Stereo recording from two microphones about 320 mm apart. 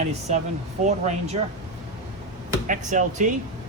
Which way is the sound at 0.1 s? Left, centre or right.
Right.